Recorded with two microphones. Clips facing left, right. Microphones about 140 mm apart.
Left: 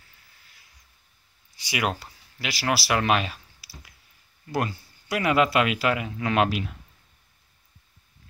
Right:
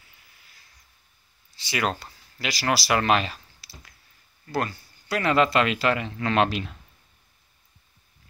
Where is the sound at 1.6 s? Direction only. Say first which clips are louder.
Even; 10° left (ahead or behind).